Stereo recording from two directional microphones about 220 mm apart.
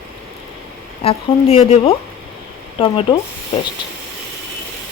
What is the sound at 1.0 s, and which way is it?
Speech, 25° left (ahead or behind).